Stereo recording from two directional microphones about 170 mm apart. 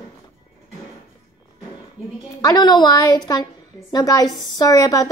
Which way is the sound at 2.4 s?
25° left (ahead or behind).